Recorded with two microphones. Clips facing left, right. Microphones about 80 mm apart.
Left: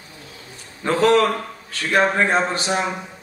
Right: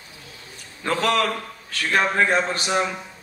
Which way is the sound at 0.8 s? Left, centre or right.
Left.